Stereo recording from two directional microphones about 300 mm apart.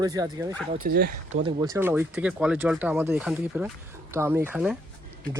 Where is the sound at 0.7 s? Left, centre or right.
Right.